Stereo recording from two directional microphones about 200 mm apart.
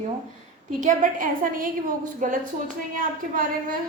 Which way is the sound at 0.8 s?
40° right (ahead or behind).